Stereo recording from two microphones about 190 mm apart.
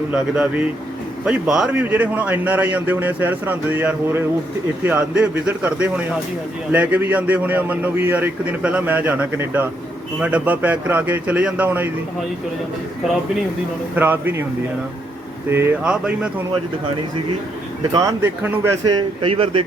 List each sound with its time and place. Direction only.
1.2 s a man's voice: 5° right (ahead or behind)
13.9 s a man's voice: 10° right (ahead or behind)
15.4 s a man's voice: 10° right (ahead or behind)
17.9 s a man's voice: 15° right (ahead or behind)
18.9 s speech: 25° right (ahead or behind)